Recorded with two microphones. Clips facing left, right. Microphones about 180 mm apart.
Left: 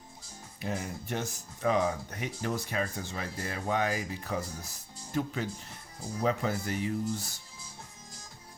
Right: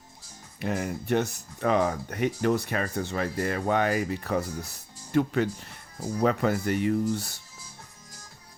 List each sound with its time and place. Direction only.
0.6 s speech: 65° right (ahead or behind)